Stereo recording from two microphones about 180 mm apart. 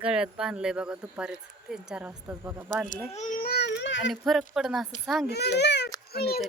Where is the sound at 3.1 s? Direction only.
45° left (ahead or behind); by 4.0 s 75° left (ahead or behind).